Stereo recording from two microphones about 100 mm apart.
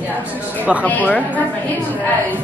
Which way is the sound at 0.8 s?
15° left (ahead or behind).